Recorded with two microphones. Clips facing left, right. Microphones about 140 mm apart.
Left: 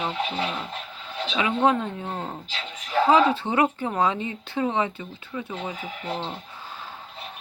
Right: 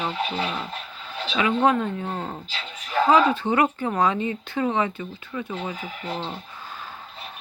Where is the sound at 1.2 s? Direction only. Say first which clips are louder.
Right 1 dB; 20° left (ahead or behind).